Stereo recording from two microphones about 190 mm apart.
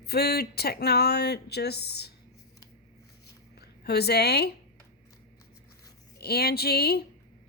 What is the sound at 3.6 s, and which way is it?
Speech, 60° left (ahead or behind).